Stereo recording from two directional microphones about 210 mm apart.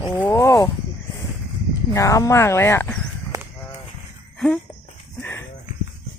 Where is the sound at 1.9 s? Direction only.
15° left (ahead or behind).